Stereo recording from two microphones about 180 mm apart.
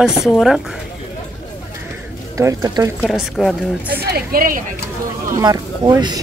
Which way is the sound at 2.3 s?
15° right (ahead or behind).